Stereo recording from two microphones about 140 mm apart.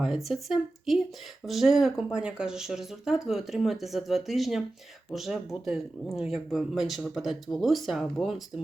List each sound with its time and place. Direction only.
0.0 s speech: centre (ahead or behind)